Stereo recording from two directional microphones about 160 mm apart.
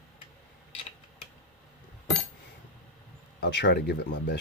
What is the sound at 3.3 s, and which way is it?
Speech, 90° left.